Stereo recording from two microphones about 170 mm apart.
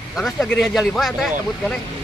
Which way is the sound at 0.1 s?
Centre (ahead or behind).